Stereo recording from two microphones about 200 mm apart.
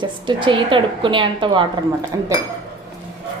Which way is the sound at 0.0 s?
25° right (ahead or behind).